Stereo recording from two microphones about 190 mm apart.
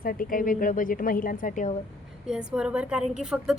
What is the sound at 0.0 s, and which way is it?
A woman's voice, 50° left (ahead or behind).